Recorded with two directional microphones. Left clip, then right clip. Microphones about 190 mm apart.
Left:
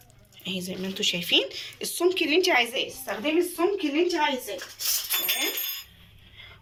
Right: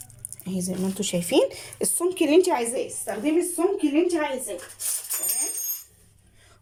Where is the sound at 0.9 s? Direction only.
40° right (ahead or behind).